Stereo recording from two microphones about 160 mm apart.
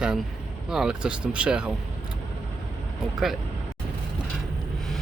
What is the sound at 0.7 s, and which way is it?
Speech, 5° right (ahead or behind).